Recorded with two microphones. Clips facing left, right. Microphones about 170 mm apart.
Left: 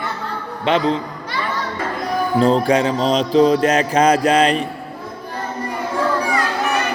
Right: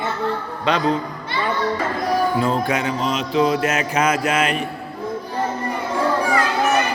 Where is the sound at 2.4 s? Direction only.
35° left (ahead or behind).